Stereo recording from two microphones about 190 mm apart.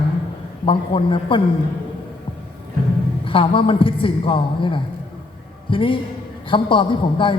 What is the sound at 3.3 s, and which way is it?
A man's voice, 30° left (ahead or behind).